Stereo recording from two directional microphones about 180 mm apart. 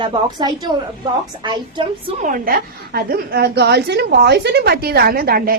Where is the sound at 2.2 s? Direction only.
50° right (ahead or behind).